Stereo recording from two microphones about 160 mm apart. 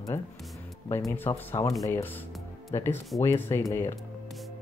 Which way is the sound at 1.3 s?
20° left (ahead or behind).